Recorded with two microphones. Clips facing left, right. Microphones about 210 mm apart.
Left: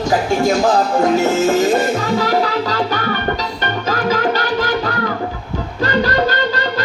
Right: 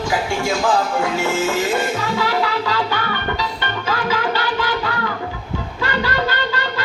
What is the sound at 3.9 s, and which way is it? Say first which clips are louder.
Music: left 4 dB; 40° left (ahead or behind).